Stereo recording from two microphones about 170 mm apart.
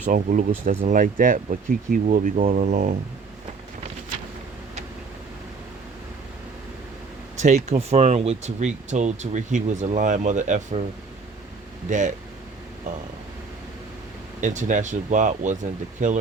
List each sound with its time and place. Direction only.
0.0 s speech: 50° right (ahead or behind)
7.3 s speech: 45° right (ahead or behind)
11.9 s speech: 50° right (ahead or behind)
14.4 s speech: 45° right (ahead or behind)